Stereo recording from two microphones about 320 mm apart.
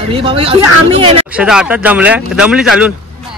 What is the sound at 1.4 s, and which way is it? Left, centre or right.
Speech, centre.